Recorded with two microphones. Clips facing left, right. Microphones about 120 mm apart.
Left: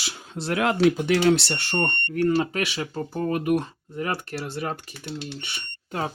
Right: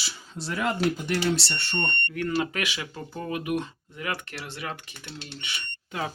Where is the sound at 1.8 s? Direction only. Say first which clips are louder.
Left 9 dB; 35° left (ahead or behind).